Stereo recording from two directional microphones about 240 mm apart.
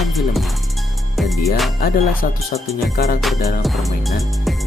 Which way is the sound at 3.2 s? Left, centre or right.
Centre.